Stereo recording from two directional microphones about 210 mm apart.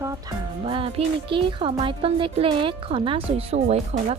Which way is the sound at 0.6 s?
25° right (ahead or behind).